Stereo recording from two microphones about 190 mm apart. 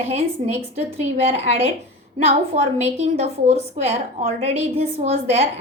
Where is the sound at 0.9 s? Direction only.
35° right (ahead or behind).